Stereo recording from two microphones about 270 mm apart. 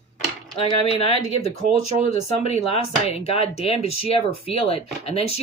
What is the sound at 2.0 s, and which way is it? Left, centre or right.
Speech, left.